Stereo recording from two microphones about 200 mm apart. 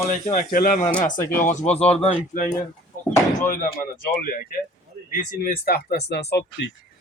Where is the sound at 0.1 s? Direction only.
40° left (ahead or behind).